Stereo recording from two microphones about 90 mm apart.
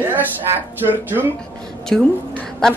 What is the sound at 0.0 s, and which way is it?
Speech, 20° right (ahead or behind).